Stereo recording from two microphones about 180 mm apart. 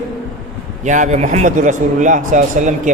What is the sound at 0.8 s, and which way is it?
Speech, 45° right (ahead or behind).